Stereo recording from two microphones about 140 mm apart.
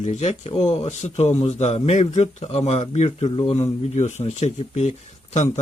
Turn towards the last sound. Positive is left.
turn(degrees=55)  # may be behind; listen again after turning